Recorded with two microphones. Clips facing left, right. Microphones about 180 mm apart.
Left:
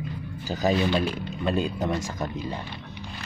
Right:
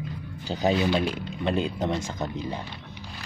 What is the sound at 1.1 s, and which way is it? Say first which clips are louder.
Speech: even; 20° right (ahead or behind).